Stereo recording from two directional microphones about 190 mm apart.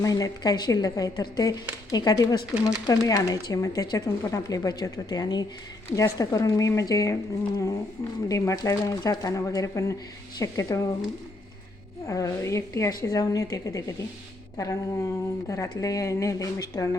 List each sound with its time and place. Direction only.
0.0 s speech: 20° left (ahead or behind)
12.0 s speech: 15° left (ahead or behind)